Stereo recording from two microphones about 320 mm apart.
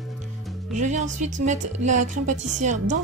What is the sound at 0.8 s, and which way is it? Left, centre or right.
A woman's voice, right.